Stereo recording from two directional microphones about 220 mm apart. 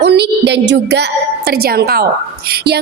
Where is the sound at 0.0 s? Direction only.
50° right (ahead or behind).